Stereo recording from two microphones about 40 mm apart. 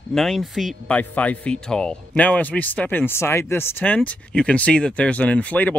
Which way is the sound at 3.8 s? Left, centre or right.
Left.